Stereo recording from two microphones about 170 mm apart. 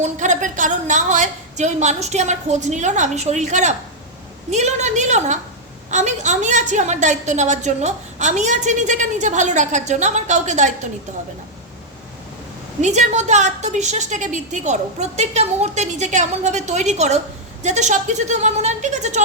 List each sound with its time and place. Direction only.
0.0 s a woman's voice: 45° right (ahead or behind)
12.8 s a woman's voice: 45° right (ahead or behind)